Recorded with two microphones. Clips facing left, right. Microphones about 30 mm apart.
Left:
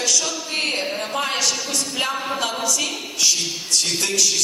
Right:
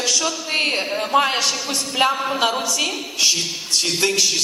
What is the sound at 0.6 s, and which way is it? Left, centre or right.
A man's voice, right.